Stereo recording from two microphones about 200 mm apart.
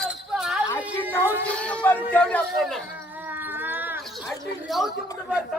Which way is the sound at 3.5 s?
10° right (ahead or behind).